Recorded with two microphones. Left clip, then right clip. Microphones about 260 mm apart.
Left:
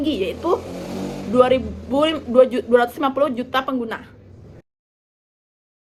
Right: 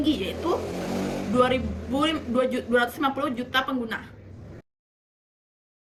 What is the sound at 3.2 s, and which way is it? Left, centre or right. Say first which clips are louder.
Speech: left 7 dB; left.